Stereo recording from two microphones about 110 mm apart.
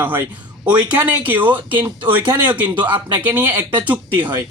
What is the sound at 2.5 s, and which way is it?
A man's voice, 15° right (ahead or behind).